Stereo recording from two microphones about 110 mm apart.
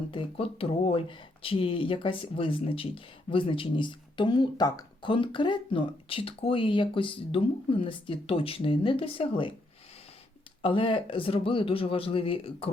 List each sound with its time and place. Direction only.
0.1 s speech: 50° left (ahead or behind)
10.6 s speech: 55° left (ahead or behind)